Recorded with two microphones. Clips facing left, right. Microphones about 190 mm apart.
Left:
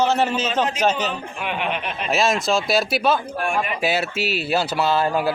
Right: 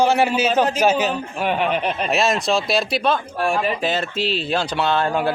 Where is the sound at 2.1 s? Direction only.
Centre (ahead or behind).